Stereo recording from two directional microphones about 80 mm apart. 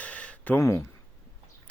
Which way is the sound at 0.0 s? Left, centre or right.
Centre.